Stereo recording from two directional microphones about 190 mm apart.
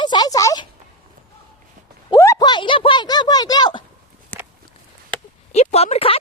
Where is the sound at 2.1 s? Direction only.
15° left (ahead or behind).